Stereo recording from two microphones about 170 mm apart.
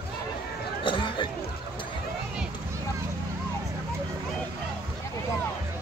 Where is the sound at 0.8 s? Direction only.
30° left (ahead or behind).